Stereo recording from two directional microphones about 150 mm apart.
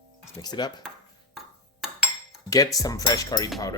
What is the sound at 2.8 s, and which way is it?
Speech, 25° left (ahead or behind).